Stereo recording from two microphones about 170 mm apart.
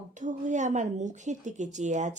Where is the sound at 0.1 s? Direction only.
45° right (ahead or behind).